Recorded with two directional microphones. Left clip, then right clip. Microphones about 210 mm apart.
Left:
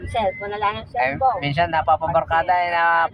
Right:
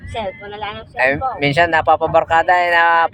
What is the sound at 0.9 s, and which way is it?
Speech, 35° right (ahead or behind).